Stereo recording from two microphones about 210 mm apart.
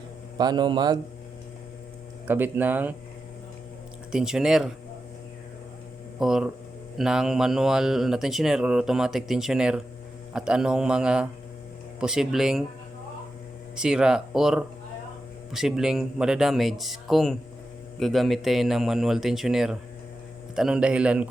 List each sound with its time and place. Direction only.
0.3 s a man's voice: 20° right (ahead or behind)
2.2 s speech: 10° right (ahead or behind)
4.1 s speech: centre (ahead or behind)
6.1 s speech: centre (ahead or behind)
13.7 s speech: 5° right (ahead or behind)